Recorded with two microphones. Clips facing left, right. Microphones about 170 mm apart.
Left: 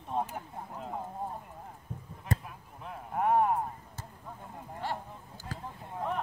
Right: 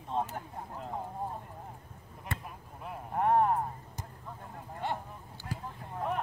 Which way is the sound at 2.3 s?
40° left (ahead or behind).